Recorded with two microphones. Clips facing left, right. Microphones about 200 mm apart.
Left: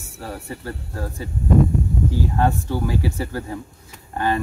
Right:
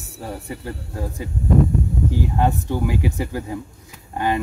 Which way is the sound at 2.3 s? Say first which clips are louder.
Even; 15° right (ahead or behind).